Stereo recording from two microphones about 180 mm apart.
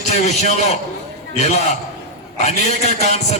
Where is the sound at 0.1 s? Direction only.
40° left (ahead or behind).